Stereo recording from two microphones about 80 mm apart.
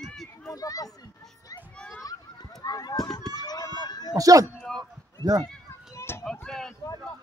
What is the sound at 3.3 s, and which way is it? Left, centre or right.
Run, left.